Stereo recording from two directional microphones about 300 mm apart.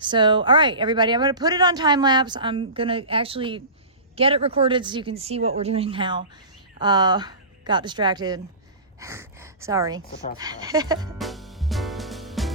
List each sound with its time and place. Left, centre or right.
0.0 s speech: centre
10.0 s speech: left
10.3 s speech: centre
11.2 s music: centre